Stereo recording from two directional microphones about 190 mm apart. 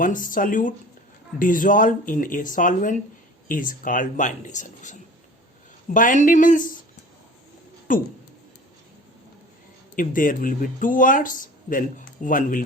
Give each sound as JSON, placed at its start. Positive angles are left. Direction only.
{"t": 0.0, "sound": "speech", "side_deg": 45}
{"t": 7.9, "sound": "speech", "side_deg": 45}
{"t": 9.9, "sound": "speech", "side_deg": 45}